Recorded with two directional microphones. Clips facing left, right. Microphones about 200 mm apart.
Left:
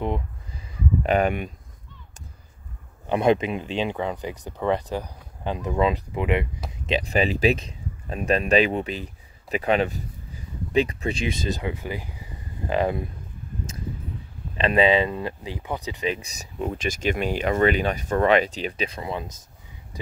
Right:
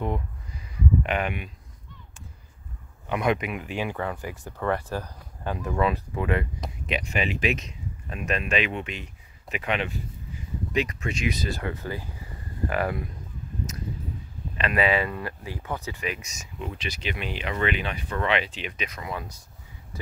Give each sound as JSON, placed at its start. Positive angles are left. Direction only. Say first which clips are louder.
{"t": 1.0, "sound": "speech", "louder": "left 7 dB", "side_deg": 40}
{"t": 3.1, "sound": "speech", "louder": "left 5 dB", "side_deg": 30}
{"t": 6.9, "sound": "speech", "louder": "left 6 dB", "side_deg": 35}
{"t": 14.6, "sound": "speech", "louder": "left 5 dB", "side_deg": 25}
{"t": 16.1, "sound": "speech", "louder": "left 5 dB", "side_deg": 35}